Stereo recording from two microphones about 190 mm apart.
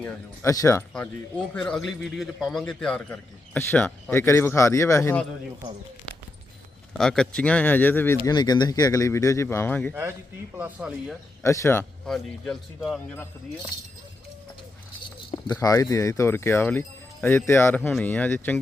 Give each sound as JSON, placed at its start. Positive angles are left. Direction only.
{"t": 0.0, "sound": "a man's voice", "side_deg": 15}
{"t": 7.0, "sound": "a man's voice", "side_deg": 5}
{"t": 8.3, "sound": "a man's voice", "side_deg": 25}
{"t": 9.9, "sound": "speech", "side_deg": -10}
{"t": 11.4, "sound": "a man's voice", "side_deg": 15}
{"t": 12.1, "sound": "speech", "side_deg": 0}
{"t": 15.5, "sound": "a man's voice", "side_deg": 15}